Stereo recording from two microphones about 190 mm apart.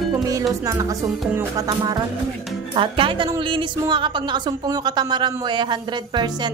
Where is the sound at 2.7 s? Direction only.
25° right (ahead or behind).